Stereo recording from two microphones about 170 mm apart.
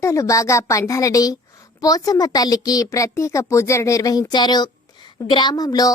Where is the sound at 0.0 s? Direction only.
20° left (ahead or behind).